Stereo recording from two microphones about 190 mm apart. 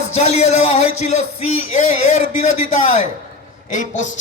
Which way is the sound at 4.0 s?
40° left (ahead or behind).